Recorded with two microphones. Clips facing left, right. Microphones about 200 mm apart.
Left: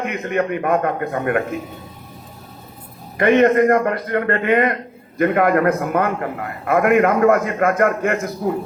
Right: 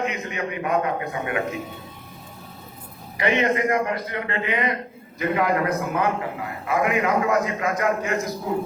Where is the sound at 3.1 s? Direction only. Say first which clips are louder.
Left 8 dB; 50° left (ahead or behind).